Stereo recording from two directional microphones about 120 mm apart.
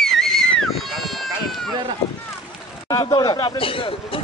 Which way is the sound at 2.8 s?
35° left (ahead or behind).